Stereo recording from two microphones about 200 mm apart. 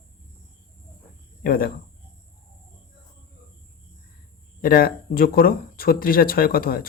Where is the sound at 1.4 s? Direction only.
45° left (ahead or behind).